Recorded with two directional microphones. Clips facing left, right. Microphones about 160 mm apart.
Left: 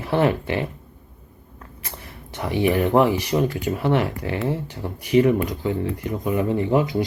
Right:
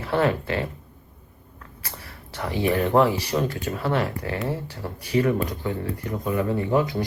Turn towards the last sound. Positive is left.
turn(degrees=15)  # may be behind; listen again after turning